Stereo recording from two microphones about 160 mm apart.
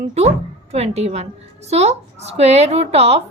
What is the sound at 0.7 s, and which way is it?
A child's voice, 40° right (ahead or behind).